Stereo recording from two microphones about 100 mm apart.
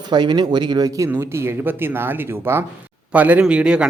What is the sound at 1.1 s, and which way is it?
A man's voice, 25° right (ahead or behind).